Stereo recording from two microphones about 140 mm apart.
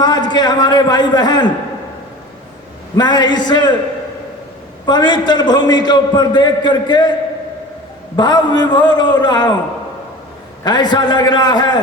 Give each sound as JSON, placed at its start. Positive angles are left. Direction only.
{"t": 0.0, "sound": "a man's voice", "side_deg": 30}
{"t": 2.9, "sound": "a man's voice", "side_deg": 30}
{"t": 4.9, "sound": "a man's voice", "side_deg": 30}
{"t": 8.1, "sound": "a man's voice", "side_deg": 30}
{"t": 10.6, "sound": "a man's voice", "side_deg": 30}